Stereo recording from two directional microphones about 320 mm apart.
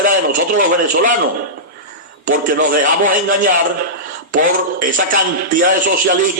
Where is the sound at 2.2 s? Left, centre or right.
Right.